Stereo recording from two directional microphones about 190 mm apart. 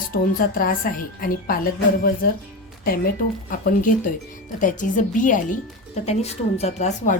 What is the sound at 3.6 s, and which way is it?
Speech, 45° left (ahead or behind).